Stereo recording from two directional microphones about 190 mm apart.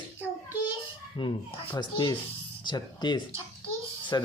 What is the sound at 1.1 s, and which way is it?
Speech, 25° left (ahead or behind).